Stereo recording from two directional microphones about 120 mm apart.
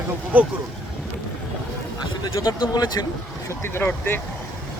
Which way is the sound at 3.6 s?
20° left (ahead or behind).